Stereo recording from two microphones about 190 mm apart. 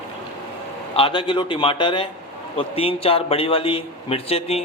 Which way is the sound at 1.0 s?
25° left (ahead or behind).